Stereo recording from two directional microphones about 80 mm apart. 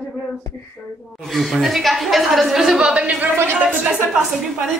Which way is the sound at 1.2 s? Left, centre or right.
Centre.